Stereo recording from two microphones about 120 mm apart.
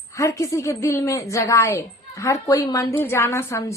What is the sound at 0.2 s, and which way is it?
A woman's voice, 25° left (ahead or behind).